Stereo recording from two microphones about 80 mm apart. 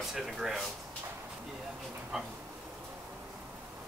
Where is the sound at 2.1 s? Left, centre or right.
Centre.